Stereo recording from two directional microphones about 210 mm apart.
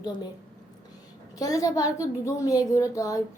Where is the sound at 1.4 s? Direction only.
15° left (ahead or behind).